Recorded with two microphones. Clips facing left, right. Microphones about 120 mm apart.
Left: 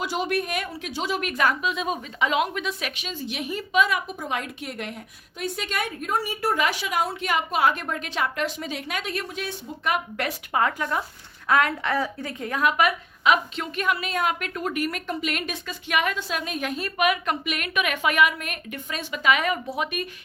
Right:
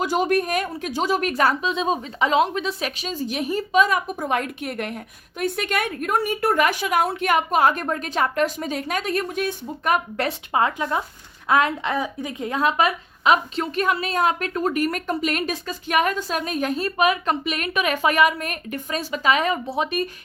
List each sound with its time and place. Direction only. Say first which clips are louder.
0.0 s speech: right 5 dB; 45° right (ahead or behind)
10.2 s speech: right 1 dB; 25° right (ahead or behind)